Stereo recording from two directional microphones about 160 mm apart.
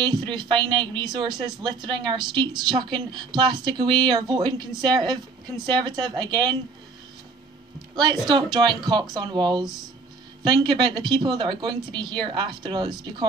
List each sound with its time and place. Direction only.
0.0 s speech: 25° right (ahead or behind)
7.9 s speech: 25° right (ahead or behind)